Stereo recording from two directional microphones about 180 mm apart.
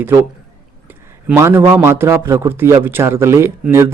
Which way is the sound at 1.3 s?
15° right (ahead or behind).